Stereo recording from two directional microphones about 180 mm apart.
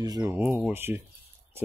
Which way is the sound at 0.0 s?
20° right (ahead or behind).